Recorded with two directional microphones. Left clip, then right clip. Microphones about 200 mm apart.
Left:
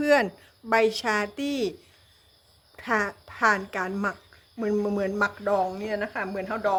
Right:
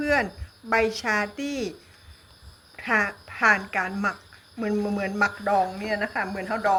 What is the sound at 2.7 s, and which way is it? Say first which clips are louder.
Speech: right 3 dB; 40° left (ahead or behind).